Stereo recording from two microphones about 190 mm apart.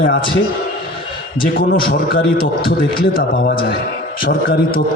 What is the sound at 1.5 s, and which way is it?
A man's voice, 50° left (ahead or behind).